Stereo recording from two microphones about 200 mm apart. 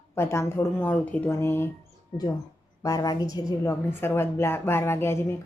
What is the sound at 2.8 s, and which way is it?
A woman's voice, 20° left (ahead or behind).